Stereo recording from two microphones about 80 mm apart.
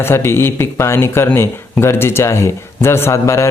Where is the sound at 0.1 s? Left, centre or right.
Left.